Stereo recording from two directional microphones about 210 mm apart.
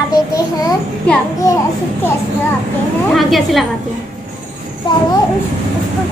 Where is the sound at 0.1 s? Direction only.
20° left (ahead or behind).